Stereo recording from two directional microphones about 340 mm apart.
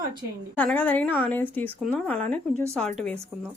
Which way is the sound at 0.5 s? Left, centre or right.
Centre.